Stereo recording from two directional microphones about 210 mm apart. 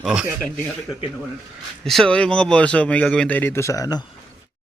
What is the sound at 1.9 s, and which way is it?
Speech, 5° left (ahead or behind).